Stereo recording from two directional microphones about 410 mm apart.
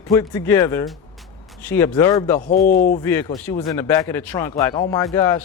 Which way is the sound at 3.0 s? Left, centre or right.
Centre.